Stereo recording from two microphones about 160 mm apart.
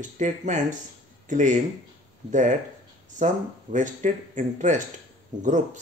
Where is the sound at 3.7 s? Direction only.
50° right (ahead or behind).